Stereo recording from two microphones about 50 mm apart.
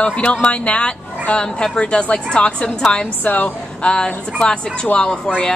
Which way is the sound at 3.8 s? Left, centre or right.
Centre.